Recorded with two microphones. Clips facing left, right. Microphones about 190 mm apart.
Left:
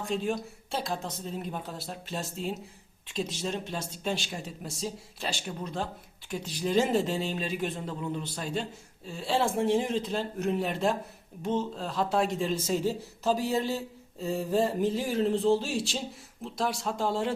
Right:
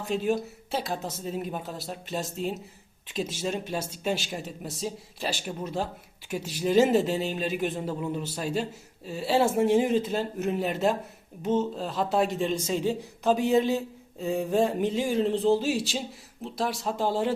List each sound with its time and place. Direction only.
0.0 s speech: 5° right (ahead or behind)
12.8 s speech: 20° right (ahead or behind)
14.2 s speech: centre (ahead or behind)